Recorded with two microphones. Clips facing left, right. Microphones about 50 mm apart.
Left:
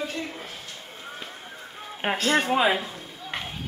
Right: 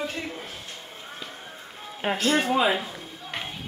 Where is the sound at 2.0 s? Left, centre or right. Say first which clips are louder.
Even; left.